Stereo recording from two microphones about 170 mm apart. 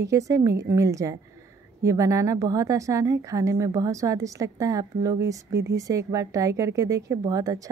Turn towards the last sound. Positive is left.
turn(degrees=-20)  # may be behind; listen again after turning